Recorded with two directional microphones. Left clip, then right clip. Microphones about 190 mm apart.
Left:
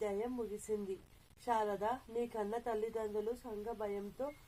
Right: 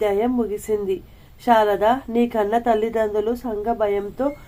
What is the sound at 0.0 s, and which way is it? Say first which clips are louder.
Speech: right 19 dB; 20° right (ahead or behind).